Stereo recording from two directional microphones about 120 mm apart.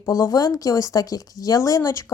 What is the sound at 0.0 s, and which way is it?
Speech, 30° left (ahead or behind).